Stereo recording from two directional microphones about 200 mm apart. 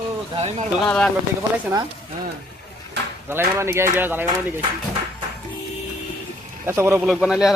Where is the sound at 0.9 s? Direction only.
5° left (ahead or behind).